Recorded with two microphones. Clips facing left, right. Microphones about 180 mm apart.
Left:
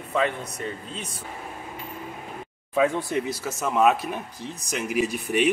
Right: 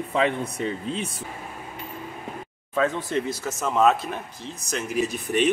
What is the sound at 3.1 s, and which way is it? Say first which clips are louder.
Speech: right 1 dB; 10° left (ahead or behind).